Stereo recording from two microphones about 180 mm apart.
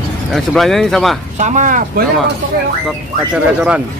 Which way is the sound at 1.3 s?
45° right (ahead or behind).